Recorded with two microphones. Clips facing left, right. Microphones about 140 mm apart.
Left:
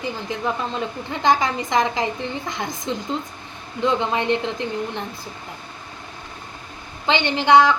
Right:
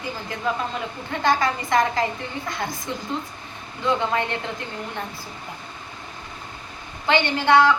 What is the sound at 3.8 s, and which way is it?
Speech, 20° left (ahead or behind).